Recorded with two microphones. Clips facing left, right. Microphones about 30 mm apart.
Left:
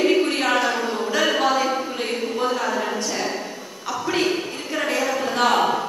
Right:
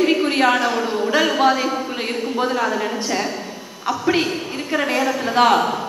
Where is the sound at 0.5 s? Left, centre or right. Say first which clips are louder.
Right 3 dB; centre.